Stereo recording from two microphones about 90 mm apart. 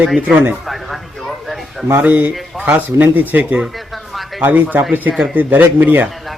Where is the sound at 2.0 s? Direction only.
15° right (ahead or behind).